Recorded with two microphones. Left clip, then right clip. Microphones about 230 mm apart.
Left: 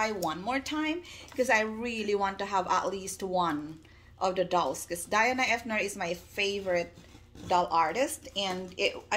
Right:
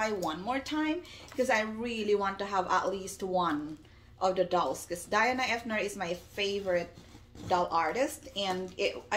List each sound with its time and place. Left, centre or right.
0.3 s speech: left